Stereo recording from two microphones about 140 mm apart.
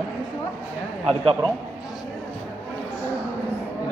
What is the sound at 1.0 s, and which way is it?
Speech, 40° right (ahead or behind).